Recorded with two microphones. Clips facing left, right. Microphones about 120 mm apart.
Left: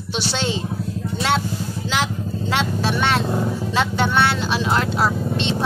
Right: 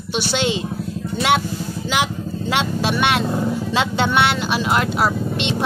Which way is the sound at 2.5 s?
15° right (ahead or behind).